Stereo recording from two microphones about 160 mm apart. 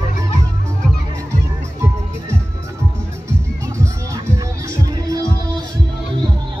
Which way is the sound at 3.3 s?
20° right (ahead or behind).